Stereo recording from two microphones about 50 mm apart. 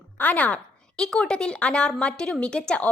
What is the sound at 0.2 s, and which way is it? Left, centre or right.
Speech, left.